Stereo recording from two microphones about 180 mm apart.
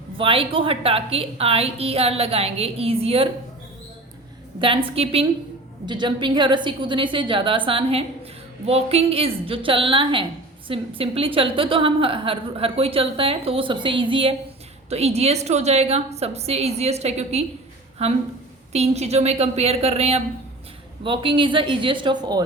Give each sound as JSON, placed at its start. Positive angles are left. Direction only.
{"t": 0.2, "sound": "a woman's voice", "side_deg": -30}
{"t": 4.6, "sound": "a woman's voice", "side_deg": -30}